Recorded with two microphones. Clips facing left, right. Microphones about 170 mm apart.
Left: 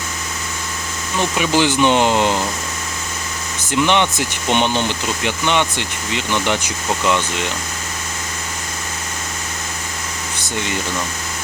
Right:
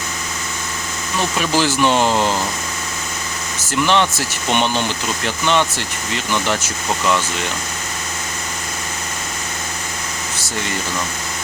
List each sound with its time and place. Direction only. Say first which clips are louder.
1.4 s speech: left 2 dB; 15° left (ahead or behind)
3.7 s speech: even; 15° left (ahead or behind)